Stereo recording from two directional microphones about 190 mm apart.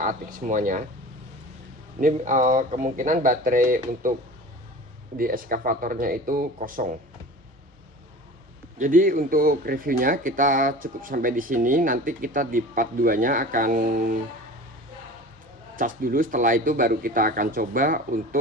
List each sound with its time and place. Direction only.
0.0 s speech: 45° right (ahead or behind)
2.0 s speech: 45° right (ahead or behind)
5.1 s speech: 45° right (ahead or behind)
8.8 s speech: 45° right (ahead or behind)
15.8 s speech: 45° right (ahead or behind)